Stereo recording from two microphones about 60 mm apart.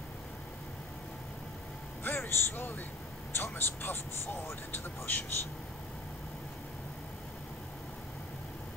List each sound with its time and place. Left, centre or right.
2.0 s vehicle: left
3.3 s speech: left